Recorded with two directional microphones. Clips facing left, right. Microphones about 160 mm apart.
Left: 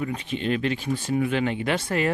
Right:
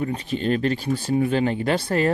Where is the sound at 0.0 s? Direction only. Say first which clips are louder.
Right 3 dB; 35° right (ahead or behind).